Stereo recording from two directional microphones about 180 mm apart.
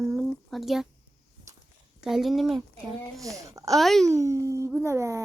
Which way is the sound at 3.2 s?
20° right (ahead or behind).